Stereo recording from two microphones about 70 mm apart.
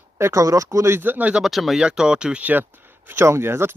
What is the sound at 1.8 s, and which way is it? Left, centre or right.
Speech, centre.